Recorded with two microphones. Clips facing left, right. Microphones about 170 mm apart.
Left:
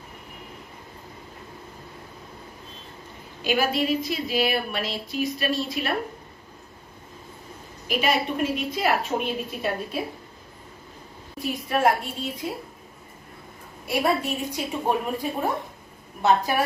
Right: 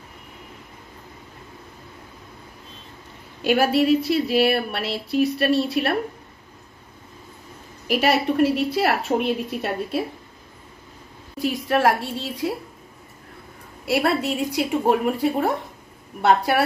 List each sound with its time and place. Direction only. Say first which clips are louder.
3.4 s speech: right 6 dB; 70° right (ahead or behind)
7.9 s speech: right 4 dB; 70° right (ahead or behind)
11.3 s a woman's voice: right 4 dB; 85° right
13.8 s speech: right 3 dB; 70° right (ahead or behind)